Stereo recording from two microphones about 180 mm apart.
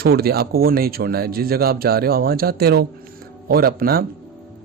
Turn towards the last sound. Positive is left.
turn(degrees=-55)  # may be behind; listen again after turning